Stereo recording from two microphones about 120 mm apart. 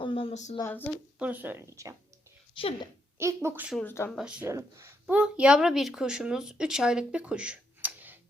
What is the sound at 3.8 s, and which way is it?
Speech, 20° left (ahead or behind).